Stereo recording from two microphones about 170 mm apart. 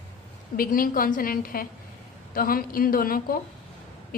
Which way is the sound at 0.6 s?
55° left (ahead or behind).